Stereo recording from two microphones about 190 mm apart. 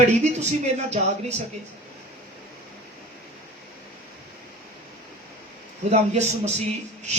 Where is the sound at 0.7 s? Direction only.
40° right (ahead or behind).